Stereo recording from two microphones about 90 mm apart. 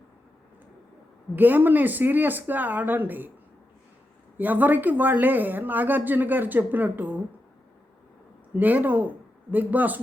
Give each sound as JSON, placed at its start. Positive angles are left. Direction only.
{"t": 1.4, "sound": "a woman's voice", "side_deg": -20}
{"t": 4.4, "sound": "a woman's voice", "side_deg": -20}
{"t": 8.5, "sound": "a woman's voice", "side_deg": -20}